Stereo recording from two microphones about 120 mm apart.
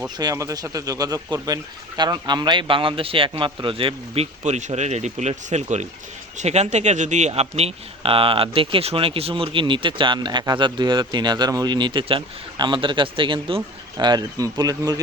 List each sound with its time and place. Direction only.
0.2 s a man's voice: 30° right (ahead or behind)